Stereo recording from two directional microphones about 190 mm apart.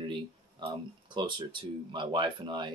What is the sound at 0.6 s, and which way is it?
Speech, 25° right (ahead or behind).